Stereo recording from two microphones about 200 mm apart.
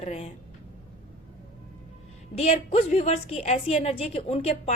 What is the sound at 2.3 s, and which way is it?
A woman's voice, 30° left (ahead or behind).